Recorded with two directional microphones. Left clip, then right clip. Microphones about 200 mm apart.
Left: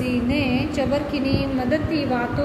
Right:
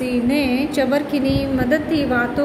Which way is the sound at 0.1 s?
40° right (ahead or behind).